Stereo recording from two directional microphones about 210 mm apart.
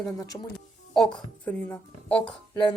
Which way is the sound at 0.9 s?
5° left (ahead or behind).